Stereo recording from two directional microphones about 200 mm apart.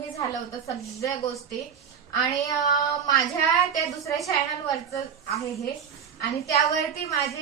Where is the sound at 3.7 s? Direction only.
15° left (ahead or behind).